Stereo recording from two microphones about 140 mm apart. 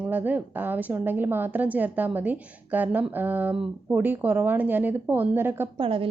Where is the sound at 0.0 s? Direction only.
10° right (ahead or behind).